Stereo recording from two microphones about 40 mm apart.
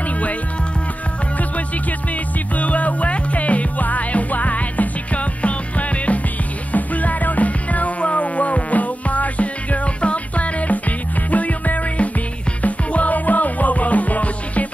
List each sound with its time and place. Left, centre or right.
2.5 s music: left